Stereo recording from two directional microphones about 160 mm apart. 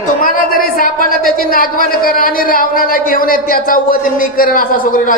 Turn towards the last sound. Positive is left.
turn(degrees=60)  # may be behind; listen again after turning